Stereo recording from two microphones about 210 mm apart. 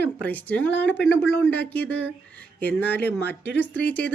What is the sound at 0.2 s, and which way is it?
A woman's voice, 10° left (ahead or behind).